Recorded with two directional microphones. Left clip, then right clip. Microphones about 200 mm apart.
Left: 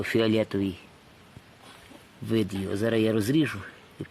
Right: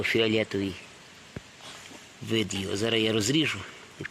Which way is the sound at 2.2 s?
55° left (ahead or behind).